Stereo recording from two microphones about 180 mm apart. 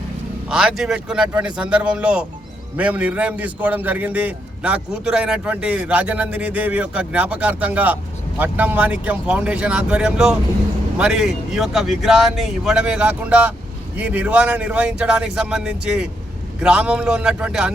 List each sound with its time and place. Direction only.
0.4 s a man's voice: 5° right (ahead or behind)